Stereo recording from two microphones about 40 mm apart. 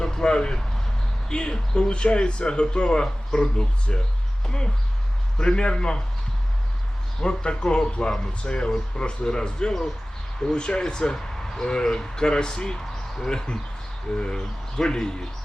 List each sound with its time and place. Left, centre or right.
0.0 s a sound: centre
1.3 s speech: left
7.2 s speech: left